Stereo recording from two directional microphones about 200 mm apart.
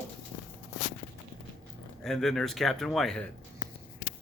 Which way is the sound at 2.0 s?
Centre (ahead or behind).